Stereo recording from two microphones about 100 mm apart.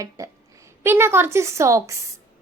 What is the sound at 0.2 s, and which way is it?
Speech, 35° right (ahead or behind).